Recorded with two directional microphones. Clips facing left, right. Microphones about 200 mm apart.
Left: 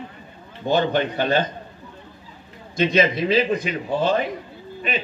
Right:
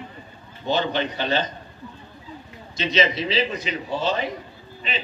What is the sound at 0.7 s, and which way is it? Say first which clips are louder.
Speech: left 3 dB; 55° left (ahead or behind).